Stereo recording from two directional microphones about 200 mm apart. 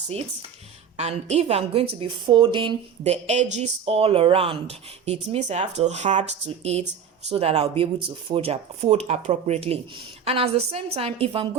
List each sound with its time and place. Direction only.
0.9 s a woman's voice: 35° right (ahead or behind)